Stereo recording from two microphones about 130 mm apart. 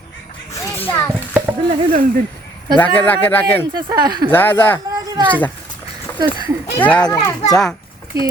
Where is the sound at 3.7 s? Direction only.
30° right (ahead or behind).